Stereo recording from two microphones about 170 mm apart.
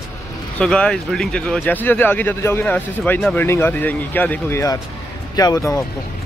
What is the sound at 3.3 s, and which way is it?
Speech, 15° left (ahead or behind).